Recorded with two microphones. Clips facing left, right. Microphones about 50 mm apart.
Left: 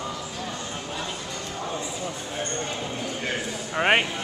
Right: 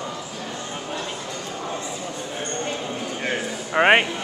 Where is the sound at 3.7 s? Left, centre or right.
Right.